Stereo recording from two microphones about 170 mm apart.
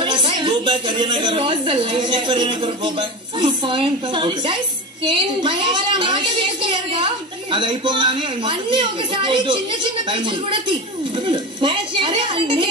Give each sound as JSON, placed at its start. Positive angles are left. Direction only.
{"t": 0.0, "sound": "a woman's voice", "side_deg": -30}